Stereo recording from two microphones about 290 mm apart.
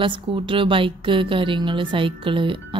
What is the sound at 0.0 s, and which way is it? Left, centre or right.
Music, centre.